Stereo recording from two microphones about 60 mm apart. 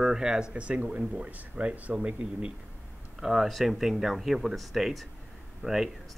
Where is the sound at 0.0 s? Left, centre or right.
Centre.